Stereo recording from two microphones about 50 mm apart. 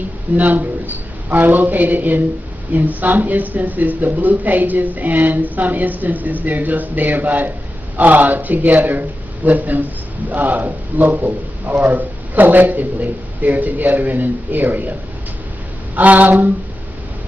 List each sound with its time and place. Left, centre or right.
0.4 s speech: right
16.0 s speech: right